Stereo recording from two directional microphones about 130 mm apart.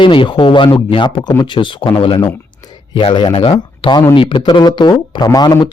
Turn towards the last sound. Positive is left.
turn(degrees=30)  # may be behind; listen again after turning